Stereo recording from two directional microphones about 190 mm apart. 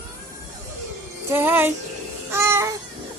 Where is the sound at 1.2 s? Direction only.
10° right (ahead or behind).